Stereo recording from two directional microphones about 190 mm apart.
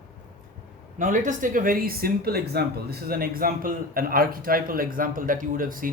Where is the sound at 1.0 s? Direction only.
40° right (ahead or behind).